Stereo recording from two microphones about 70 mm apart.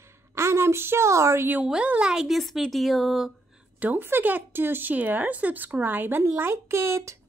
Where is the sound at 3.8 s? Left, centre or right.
Right.